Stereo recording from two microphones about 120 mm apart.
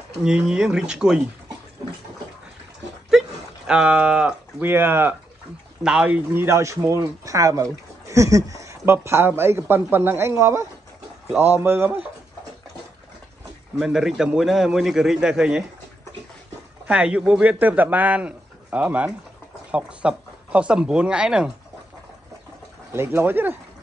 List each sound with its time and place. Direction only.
0.2 s speech: 5° right (ahead or behind)
3.1 s speech: 5° right (ahead or behind)
6.4 s speech: 25° right (ahead or behind)
13.7 s a man's voice: 5° right (ahead or behind)
16.8 s speech: 10° right (ahead or behind)
22.9 s speech: 20° right (ahead or behind)